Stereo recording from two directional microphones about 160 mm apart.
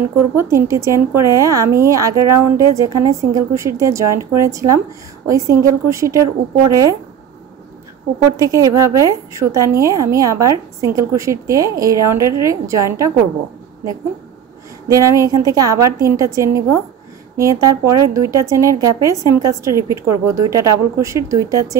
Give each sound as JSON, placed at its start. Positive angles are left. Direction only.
{"t": 0.4, "sound": "a woman's voice", "side_deg": -15}
{"t": 8.4, "sound": "a woman's voice", "side_deg": -20}
{"t": 14.9, "sound": "a woman's voice", "side_deg": -20}